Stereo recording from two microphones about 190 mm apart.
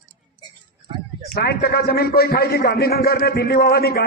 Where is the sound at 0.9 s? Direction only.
25° right (ahead or behind).